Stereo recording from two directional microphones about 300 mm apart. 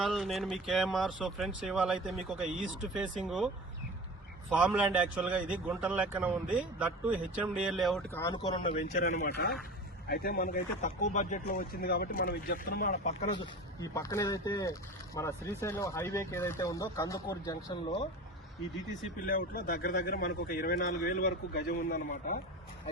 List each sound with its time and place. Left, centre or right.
0.0 s a man's voice: centre
4.5 s a man's voice: centre
19.2 s speech: left